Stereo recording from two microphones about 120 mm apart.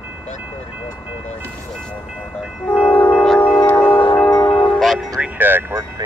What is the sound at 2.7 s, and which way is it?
Train, 50° left (ahead or behind).